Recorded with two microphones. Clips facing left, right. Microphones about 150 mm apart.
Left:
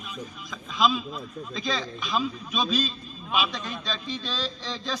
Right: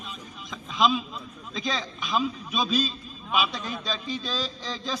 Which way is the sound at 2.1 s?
10° right (ahead or behind).